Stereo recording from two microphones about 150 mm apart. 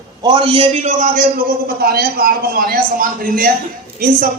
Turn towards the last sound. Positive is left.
turn(degrees=-70)  # may be behind; listen again after turning